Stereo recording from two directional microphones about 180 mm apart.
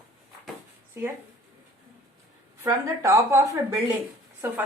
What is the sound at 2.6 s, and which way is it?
A woman's voice, 15° right (ahead or behind).